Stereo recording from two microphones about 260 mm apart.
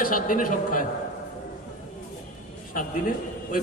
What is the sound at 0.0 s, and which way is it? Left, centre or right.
Speech, left.